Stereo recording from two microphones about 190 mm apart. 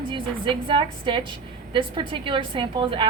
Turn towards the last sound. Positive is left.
turn(degrees=-25)  # may be behind; listen again after turning